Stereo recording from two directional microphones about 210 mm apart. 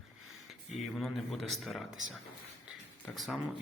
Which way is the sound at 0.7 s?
Centre (ahead or behind).